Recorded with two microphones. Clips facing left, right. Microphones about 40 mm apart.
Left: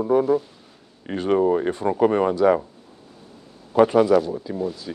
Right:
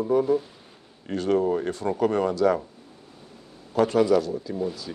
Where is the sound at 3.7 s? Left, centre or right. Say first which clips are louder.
Left 4 dB; left.